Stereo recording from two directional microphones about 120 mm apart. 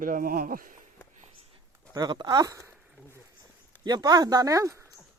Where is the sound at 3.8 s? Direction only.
35° right (ahead or behind).